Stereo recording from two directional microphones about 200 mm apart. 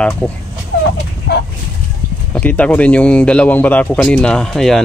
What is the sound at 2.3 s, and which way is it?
Speech, 5° left (ahead or behind).